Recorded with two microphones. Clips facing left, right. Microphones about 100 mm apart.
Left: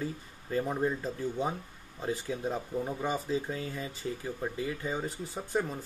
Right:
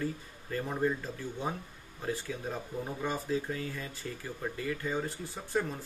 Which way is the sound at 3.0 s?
15° left (ahead or behind).